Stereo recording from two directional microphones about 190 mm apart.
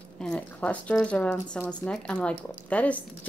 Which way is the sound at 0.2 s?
5° left (ahead or behind).